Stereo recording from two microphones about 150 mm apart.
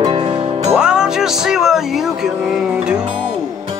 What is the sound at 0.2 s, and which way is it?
Music, 30° right (ahead or behind).